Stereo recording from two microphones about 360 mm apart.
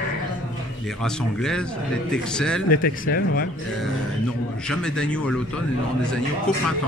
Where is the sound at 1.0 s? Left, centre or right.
Centre.